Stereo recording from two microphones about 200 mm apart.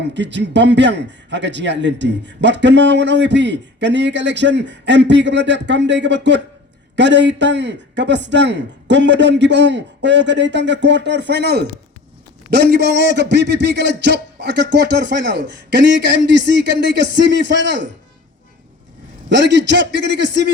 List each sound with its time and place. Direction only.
0.1 s a man's voice: 60° right (ahead or behind)
19.3 s a man's voice: 60° right (ahead or behind)